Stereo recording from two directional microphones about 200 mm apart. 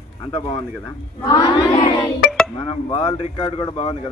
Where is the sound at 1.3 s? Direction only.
25° left (ahead or behind).